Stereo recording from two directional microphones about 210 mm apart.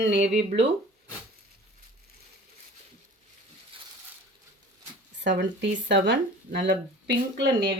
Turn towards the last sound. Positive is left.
turn(degrees=-55)  # may be behind; listen again after turning